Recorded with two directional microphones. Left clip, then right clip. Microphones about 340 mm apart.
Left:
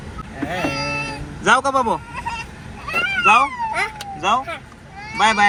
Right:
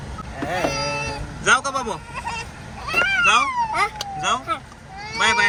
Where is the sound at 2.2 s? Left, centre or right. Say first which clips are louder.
Left 2 dB; right.